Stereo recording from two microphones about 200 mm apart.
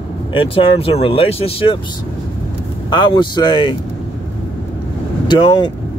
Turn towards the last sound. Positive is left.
turn(degrees=20)  # may be behind; listen again after turning